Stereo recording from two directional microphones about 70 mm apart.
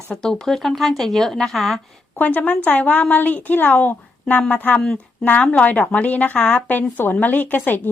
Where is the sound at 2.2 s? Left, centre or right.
Left.